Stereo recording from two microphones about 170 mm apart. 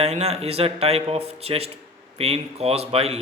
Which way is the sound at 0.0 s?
40° right (ahead or behind).